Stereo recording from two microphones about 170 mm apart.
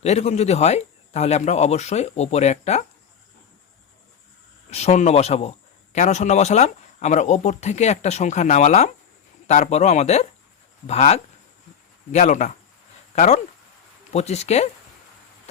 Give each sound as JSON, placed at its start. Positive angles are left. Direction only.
{"t": 0.0, "sound": "a man's voice", "side_deg": 40}
{"t": 4.7, "sound": "a man's voice", "side_deg": 40}